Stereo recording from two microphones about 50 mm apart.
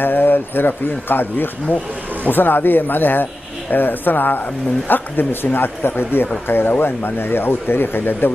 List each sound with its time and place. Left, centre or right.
0.0 s speech: left